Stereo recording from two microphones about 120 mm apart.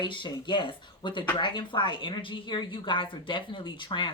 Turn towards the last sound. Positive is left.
turn(degrees=40)  # may be behind; listen again after turning